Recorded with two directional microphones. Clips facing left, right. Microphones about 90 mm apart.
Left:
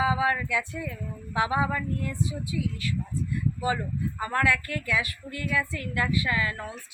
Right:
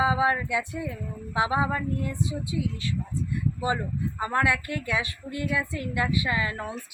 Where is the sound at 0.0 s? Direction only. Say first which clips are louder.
Right 2 dB; 25° right (ahead or behind).